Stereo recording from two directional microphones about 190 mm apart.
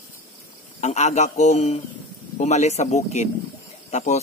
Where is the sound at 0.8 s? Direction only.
35° left (ahead or behind).